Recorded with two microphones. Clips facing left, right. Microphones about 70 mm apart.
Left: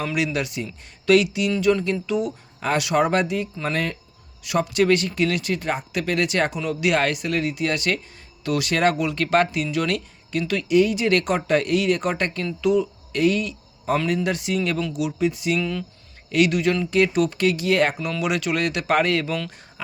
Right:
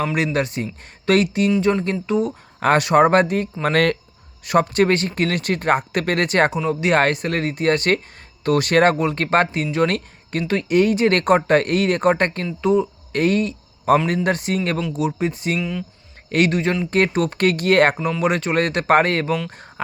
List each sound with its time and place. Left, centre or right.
0.3 s speech: right
4.4 s speech: right